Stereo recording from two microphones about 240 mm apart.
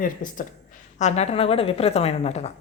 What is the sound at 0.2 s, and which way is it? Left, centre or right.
A woman's voice, left.